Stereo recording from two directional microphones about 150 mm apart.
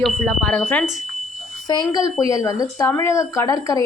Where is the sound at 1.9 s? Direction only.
20° left (ahead or behind).